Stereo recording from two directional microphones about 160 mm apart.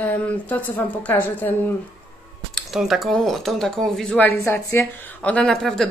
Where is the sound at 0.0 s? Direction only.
10° left (ahead or behind).